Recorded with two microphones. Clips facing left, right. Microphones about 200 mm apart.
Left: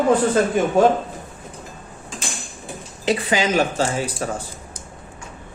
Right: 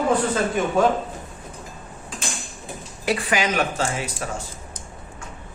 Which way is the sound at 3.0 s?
25° left (ahead or behind).